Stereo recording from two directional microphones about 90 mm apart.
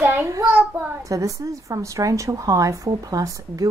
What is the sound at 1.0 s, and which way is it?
A woman's voice, 40° right (ahead or behind).